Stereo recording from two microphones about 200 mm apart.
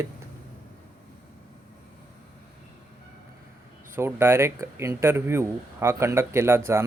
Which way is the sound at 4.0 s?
10° right (ahead or behind).